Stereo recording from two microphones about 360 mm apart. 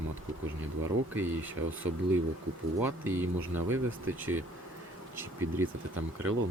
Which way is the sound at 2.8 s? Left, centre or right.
Centre.